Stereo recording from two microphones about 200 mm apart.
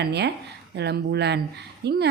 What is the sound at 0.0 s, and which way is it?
A woman's voice, 55° right (ahead or behind).